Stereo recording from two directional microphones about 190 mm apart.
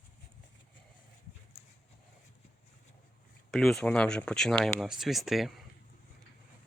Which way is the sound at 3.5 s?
Centre (ahead or behind).